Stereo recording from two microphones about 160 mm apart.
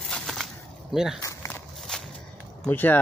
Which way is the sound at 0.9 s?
5° right (ahead or behind).